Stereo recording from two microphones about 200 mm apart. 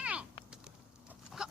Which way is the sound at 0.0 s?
5° right (ahead or behind).